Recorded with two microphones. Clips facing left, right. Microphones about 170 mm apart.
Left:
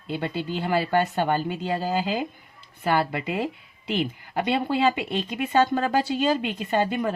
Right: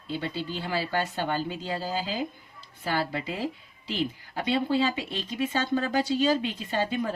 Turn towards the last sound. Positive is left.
turn(degrees=60)  # may be behind; listen again after turning